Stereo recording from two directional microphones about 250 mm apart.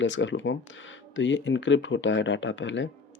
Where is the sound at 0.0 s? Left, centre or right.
Left.